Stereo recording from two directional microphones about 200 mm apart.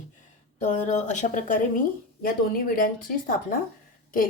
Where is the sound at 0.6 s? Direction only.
35° left (ahead or behind).